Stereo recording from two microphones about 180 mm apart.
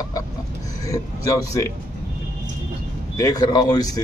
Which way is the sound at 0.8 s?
20° left (ahead or behind).